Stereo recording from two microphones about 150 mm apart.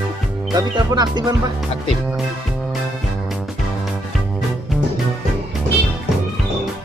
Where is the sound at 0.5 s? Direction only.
25° right (ahead or behind).